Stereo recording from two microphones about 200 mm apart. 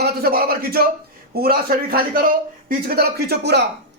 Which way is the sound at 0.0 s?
50° right (ahead or behind).